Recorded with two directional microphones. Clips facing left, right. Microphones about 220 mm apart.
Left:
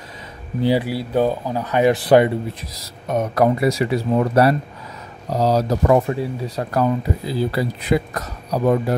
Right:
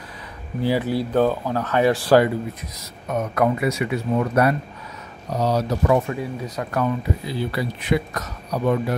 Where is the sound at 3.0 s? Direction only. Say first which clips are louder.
Left 3 dB; 35° left (ahead or behind).